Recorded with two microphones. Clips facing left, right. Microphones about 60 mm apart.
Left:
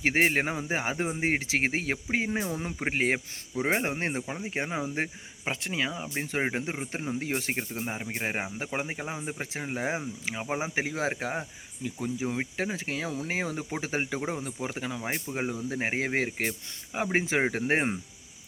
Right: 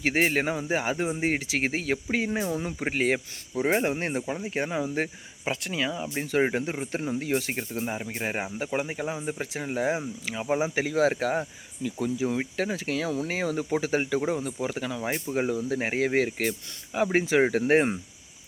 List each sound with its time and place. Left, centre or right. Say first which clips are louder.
0.0 s speech: right 1 dB; left
3.6 s speech: right 3 dB; centre
7.2 s speech: right 3 dB; left
10.3 s speech: right 5 dB; centre
14.4 s speech: right 4 dB; left
14.9 s speech: right 4 dB; centre